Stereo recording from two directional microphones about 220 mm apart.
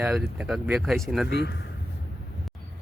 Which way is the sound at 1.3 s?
50° left (ahead or behind).